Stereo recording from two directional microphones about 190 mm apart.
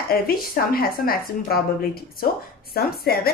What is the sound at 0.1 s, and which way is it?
A woman's voice, 50° left (ahead or behind).